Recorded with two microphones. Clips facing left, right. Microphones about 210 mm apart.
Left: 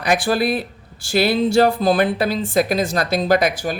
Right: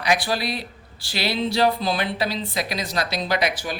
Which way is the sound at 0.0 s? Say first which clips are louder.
Left 5 dB; 50° left (ahead or behind).